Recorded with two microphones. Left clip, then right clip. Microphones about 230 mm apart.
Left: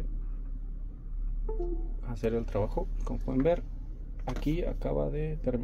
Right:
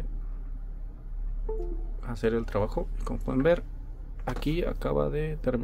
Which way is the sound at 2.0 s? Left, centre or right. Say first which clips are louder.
Right 4 dB; right.